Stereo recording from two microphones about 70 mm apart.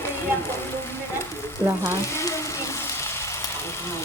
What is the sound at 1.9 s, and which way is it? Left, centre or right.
Speech, left.